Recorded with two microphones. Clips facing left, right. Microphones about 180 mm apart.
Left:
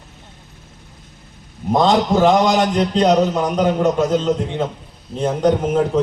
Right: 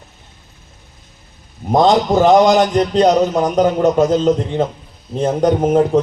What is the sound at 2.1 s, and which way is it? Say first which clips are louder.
A man's voice: right 5 dB; 45° right (ahead or behind).